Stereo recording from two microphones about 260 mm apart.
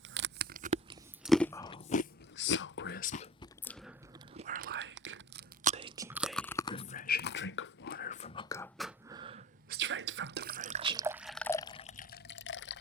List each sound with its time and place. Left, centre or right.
0.1 s a sound: right
0.5 s a sound: right
1.2 s biting: centre
2.3 s whispering: left
3.4 s chewing: centre
4.4 s whispering: right
5.6 s whispering: right
6.0 s chewing: centre; by 7.9 s left
7.9 s whispering: left; by 8.7 s centre
9.0 s a sound: centre
9.6 s drip: right; by 12.2 s left
12.3 s water: left